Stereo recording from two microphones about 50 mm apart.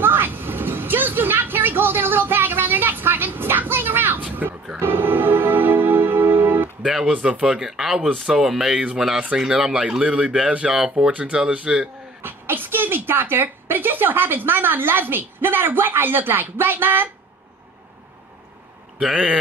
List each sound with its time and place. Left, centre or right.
0.0 s vehicle: right
4.7 s music: right
6.8 s speech: centre
7.2 s speech: right
7.4 s speech: centre
12.2 s speech: right